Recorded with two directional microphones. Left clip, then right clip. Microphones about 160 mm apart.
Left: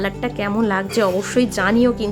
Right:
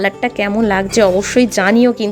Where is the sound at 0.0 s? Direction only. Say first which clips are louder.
Right 7 dB; 20° right (ahead or behind).